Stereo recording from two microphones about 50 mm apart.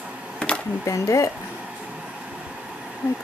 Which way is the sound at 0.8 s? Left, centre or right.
Left.